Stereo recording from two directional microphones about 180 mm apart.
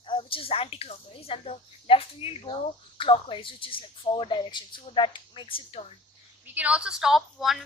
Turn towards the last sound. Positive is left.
turn(degrees=0)  # may be behind; listen again after turning